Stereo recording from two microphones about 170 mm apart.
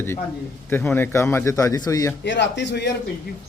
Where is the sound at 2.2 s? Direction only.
90° left.